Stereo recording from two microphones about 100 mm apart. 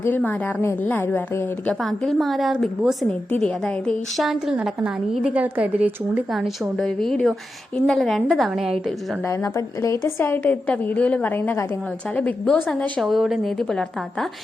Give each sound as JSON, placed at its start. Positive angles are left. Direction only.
{"t": 0.0, "sound": "a woman's voice", "side_deg": 15}
{"t": 1.8, "sound": "a woman's voice", "side_deg": 0}
{"t": 4.6, "sound": "a woman's voice", "side_deg": -5}
{"t": 6.3, "sound": "a woman's voice", "side_deg": 0}
{"t": 9.2, "sound": "a woman's voice", "side_deg": 30}
{"t": 13.0, "sound": "a woman's voice", "side_deg": 0}